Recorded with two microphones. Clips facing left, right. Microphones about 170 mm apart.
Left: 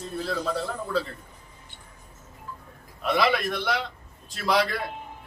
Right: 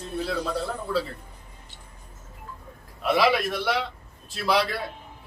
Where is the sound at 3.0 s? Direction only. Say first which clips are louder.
Right 2 dB; 5° right (ahead or behind).